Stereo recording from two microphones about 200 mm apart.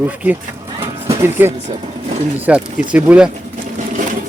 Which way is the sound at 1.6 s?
30° right (ahead or behind).